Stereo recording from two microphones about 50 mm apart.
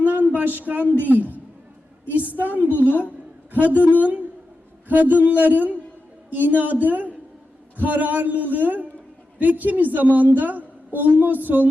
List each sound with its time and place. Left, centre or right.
0.0 s a sound: right
1.0 s a woman's voice: right
2.4 s a woman's voice: right